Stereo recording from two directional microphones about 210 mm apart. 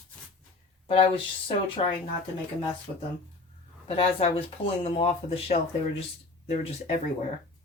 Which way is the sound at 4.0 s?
25° left (ahead or behind).